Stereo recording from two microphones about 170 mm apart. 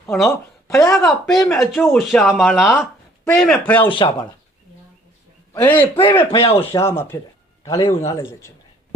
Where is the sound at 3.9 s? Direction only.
30° left (ahead or behind).